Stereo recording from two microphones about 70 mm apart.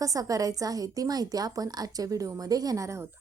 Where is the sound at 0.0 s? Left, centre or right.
Right.